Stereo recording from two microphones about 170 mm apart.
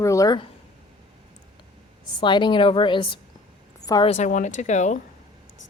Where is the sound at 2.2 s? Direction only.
30° left (ahead or behind).